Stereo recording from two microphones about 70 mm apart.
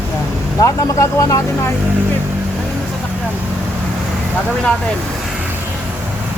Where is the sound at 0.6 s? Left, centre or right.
Left.